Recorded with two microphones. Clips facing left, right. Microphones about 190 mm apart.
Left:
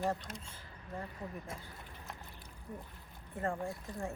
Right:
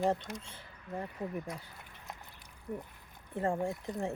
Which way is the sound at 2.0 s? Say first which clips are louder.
Right 3 dB; 15° right (ahead or behind).